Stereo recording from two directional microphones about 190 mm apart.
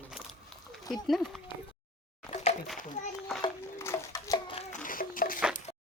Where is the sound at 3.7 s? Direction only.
15° left (ahead or behind); by 4.8 s 30° left (ahead or behind).